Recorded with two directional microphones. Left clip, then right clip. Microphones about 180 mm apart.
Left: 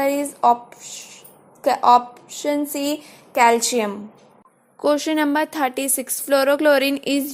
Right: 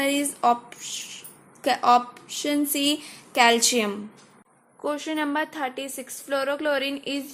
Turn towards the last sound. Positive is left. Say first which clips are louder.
# left 8 dB
turn(degrees=40)  # may be behind; listen again after turning